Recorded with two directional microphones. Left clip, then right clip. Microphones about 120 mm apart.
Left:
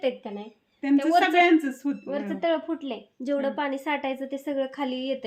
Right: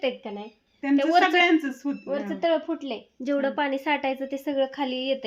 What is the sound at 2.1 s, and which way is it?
Speech, 45° right (ahead or behind).